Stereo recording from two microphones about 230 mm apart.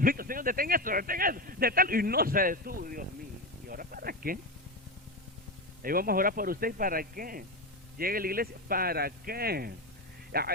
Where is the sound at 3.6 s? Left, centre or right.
Right.